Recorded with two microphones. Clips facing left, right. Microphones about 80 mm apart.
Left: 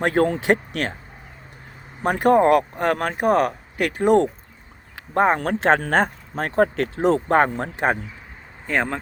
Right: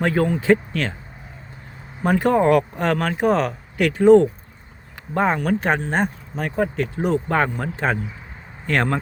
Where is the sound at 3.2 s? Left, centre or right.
Left.